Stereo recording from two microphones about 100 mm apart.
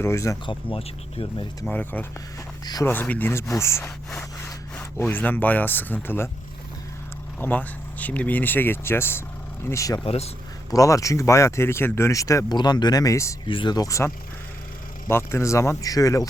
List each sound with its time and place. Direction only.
0.0 s speech: 30° left (ahead or behind)
0.4 s speech: 70° left (ahead or behind)
1.6 s speech: 15° left (ahead or behind)
3.8 s speech: 10° left (ahead or behind)
7.3 s speech: 15° left (ahead or behind); by 10.0 s 30° left (ahead or behind)
10.0 s speech: 90° left
10.7 s speech: 35° left (ahead or behind)
12.5 s speech: 45° left (ahead or behind)
13.5 s speech: 55° left (ahead or behind)
13.7 s speech: 30° left (ahead or behind)
15.1 s speech: 25° left (ahead or behind)